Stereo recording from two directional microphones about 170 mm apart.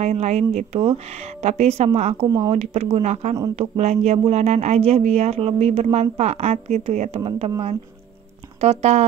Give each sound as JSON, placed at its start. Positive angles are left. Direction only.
{"t": 0.0, "sound": "speech", "side_deg": -40}
{"t": 2.2, "sound": "speech", "side_deg": -20}
{"t": 2.5, "sound": "speech", "side_deg": -40}
{"t": 8.5, "sound": "speech", "side_deg": -40}